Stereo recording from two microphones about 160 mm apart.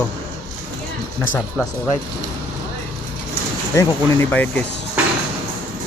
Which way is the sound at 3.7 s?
10° left (ahead or behind).